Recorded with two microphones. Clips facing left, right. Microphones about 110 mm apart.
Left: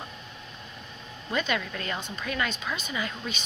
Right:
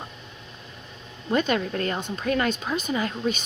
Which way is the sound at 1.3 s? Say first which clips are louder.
Right 6 dB; 40° right (ahead or behind).